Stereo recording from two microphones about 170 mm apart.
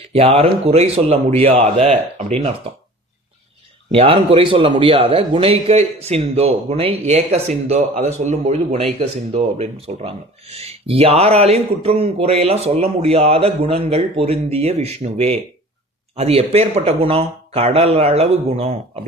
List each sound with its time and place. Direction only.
0.1 s speech: 35° right (ahead or behind)
3.9 s speech: 30° right (ahead or behind)